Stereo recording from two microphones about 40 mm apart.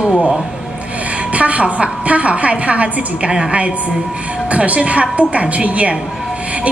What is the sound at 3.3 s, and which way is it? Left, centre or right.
Speech, right.